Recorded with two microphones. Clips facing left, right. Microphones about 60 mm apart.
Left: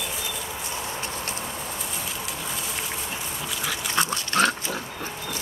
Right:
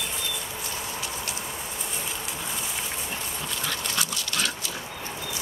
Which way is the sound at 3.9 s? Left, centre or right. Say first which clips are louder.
Left 7 dB; left.